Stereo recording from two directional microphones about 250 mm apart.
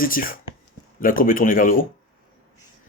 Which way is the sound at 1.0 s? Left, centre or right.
Left.